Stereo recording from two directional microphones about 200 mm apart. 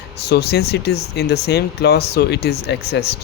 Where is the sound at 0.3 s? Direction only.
55° left (ahead or behind).